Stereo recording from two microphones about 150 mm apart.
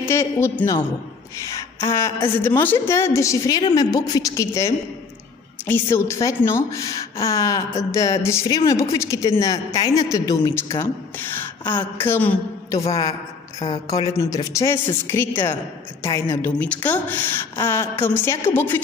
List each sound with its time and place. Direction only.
0.1 s a woman's voice: 15° left (ahead or behind)
12.7 s a woman's voice: 25° left (ahead or behind)